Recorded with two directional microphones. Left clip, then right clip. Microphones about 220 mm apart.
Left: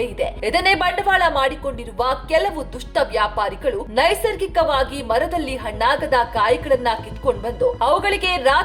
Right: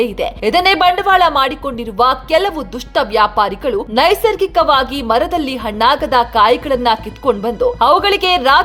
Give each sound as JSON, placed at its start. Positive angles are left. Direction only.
{"t": 0.0, "sound": "a woman's voice", "side_deg": -35}